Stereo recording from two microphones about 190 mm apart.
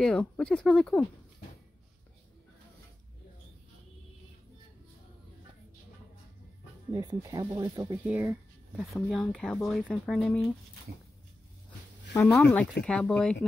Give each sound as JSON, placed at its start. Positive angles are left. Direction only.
{"t": 0.0, "sound": "speech", "side_deg": 5}
{"t": 6.9, "sound": "speech", "side_deg": -20}
{"t": 12.1, "sound": "speech", "side_deg": 10}